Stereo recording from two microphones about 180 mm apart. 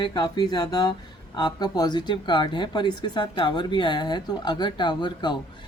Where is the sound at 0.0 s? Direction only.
20° left (ahead or behind).